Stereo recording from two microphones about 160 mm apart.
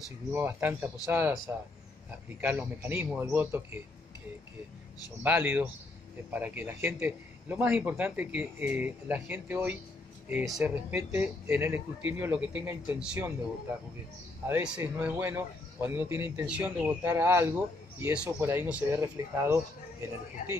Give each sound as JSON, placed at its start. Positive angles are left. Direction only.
{"t": 0.3, "sound": "speech", "side_deg": -15}
{"t": 5.2, "sound": "speech", "side_deg": -10}
{"t": 14.5, "sound": "speech", "side_deg": -15}